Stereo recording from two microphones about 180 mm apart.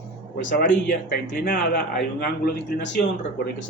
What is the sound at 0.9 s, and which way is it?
A man's voice, 55° left (ahead or behind).